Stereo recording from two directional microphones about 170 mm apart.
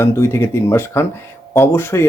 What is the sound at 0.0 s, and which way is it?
Speech, 15° left (ahead or behind).